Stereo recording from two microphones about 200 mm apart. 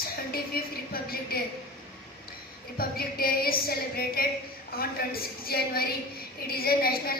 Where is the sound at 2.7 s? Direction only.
50° left (ahead or behind).